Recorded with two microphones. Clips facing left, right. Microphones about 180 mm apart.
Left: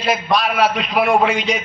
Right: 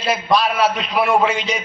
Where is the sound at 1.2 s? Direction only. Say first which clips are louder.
Left 2 dB; 35° right (ahead or behind).